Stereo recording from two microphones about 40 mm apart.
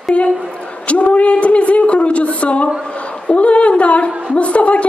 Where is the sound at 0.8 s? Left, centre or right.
Left.